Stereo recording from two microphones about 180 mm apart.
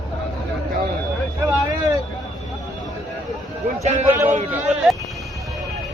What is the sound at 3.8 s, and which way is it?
Speech, 40° right (ahead or behind).